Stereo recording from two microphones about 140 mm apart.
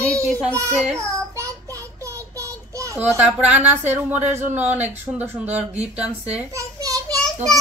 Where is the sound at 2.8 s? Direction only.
20° right (ahead or behind).